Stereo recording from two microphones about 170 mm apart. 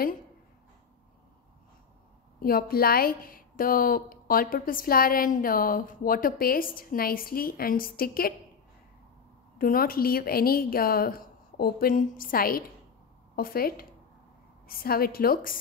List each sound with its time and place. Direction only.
2.4 s speech: 60° left (ahead or behind)
9.6 s speech: 60° left (ahead or behind)